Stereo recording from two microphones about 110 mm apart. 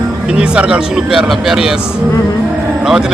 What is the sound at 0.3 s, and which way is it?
Speech, 10° right (ahead or behind).